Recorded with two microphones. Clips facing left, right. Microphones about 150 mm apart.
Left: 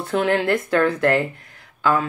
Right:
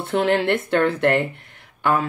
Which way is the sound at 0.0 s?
25° right (ahead or behind).